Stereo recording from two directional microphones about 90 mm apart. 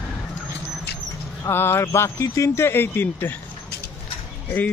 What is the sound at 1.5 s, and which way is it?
Speech, 25° left (ahead or behind).